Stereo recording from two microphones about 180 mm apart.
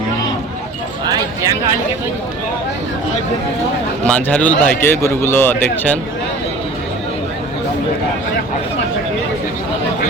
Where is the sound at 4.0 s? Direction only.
10° left (ahead or behind).